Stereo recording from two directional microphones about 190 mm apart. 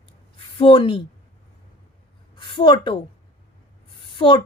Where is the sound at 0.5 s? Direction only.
25° left (ahead or behind).